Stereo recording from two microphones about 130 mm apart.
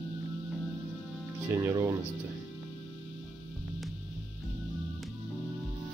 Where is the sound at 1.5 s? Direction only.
20° right (ahead or behind).